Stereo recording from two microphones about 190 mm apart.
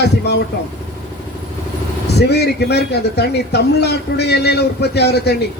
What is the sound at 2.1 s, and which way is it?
A man's voice, 60° left (ahead or behind).